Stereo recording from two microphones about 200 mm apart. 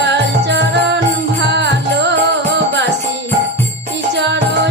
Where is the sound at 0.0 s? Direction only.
60° right (ahead or behind).